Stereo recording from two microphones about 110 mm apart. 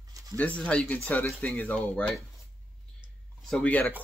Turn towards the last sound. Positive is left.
turn(degrees=15)  # may be behind; listen again after turning